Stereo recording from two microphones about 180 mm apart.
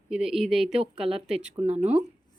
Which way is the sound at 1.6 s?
35° right (ahead or behind).